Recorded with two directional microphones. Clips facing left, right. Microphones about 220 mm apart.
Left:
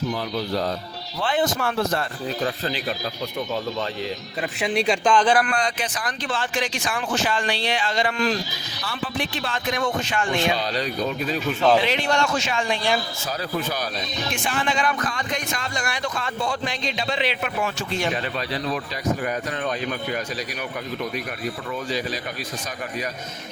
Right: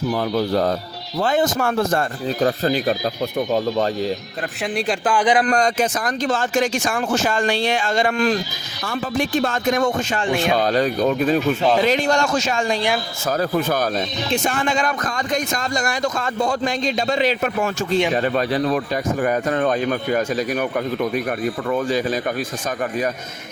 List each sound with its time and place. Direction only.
0.1 s speech: 50° right (ahead or behind)
4.6 s speech: centre (ahead or behind); by 5.5 s 15° right (ahead or behind)
5.5 s speech: 45° right (ahead or behind)